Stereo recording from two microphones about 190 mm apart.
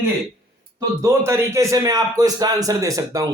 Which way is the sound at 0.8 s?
15° right (ahead or behind).